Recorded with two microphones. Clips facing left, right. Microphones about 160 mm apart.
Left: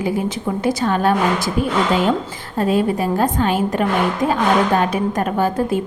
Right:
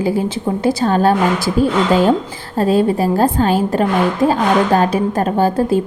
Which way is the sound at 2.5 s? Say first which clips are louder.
Right 3 dB; 35° right (ahead or behind).